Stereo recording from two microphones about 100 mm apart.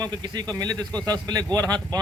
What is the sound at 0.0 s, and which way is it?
Speech, 45° right (ahead or behind).